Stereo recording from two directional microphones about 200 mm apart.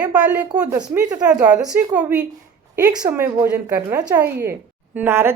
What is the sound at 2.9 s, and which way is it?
A woman's voice, 20° right (ahead or behind).